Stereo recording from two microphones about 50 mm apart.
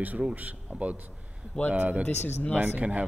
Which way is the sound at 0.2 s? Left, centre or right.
Right.